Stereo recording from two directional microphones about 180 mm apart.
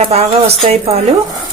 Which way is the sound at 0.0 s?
35° right (ahead or behind).